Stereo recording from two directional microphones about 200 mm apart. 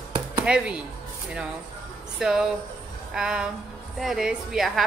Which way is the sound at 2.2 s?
Centre (ahead or behind).